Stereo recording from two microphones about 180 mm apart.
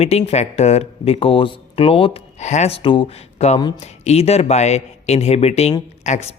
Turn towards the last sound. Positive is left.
turn(degrees=40)  # may be behind; listen again after turning